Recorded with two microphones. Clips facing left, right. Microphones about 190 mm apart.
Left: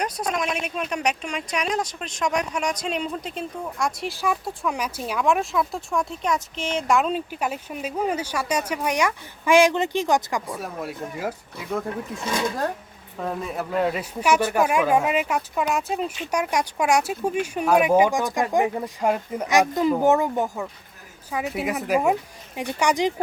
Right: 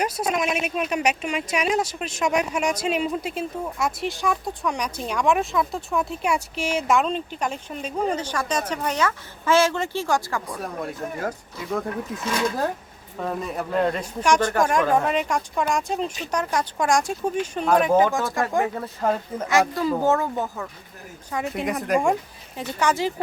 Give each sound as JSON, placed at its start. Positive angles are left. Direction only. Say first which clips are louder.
{"t": 0.0, "sound": "speech", "louder": "right 2 dB", "side_deg": -5}
{"t": 10.4, "sound": "speech", "louder": "right 1 dB", "side_deg": 0}
{"t": 12.2, "sound": "speech", "louder": "right 1 dB", "side_deg": 15}
{"t": 13.1, "sound": "speech", "louder": "right 1 dB", "side_deg": 0}